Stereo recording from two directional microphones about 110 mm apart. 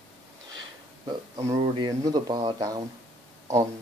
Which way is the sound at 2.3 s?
55° right (ahead or behind).